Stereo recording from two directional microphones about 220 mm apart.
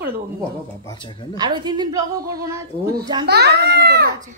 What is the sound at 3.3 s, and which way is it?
Speech, 50° right (ahead or behind).